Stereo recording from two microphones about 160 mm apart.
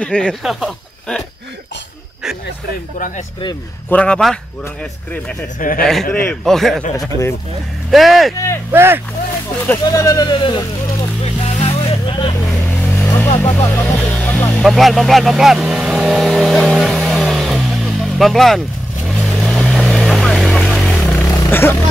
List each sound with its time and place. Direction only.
0.0 s speech: 5° left (ahead or behind)
3.9 s a man's voice: 5° left (ahead or behind)
5.6 s a man's voice: 60° left (ahead or behind)
6.4 s speech: centre (ahead or behind)
7.0 s a man's voice: 15° left (ahead or behind)
7.9 s speech: centre (ahead or behind)
8.7 s speech: 15° right (ahead or behind)
9.8 s speech: 20° left (ahead or behind)
11.4 s vehicle: 40° left (ahead or behind)
12.8 s vehicle: 15° left (ahead or behind)
21.4 s a sound: 15° left (ahead or behind)